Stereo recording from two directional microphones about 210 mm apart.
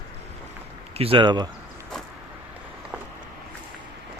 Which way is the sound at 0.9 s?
25° right (ahead or behind).